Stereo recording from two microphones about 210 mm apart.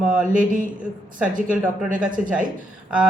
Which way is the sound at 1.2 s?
5° right (ahead or behind).